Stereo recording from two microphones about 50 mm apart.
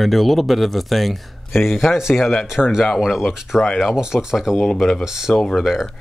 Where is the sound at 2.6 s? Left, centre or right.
Centre.